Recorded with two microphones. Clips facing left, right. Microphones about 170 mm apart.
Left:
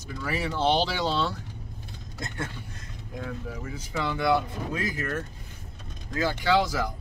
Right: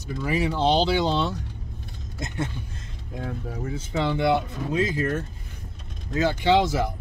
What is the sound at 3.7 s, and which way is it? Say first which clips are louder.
Speech: right 5 dB; 25° right (ahead or behind).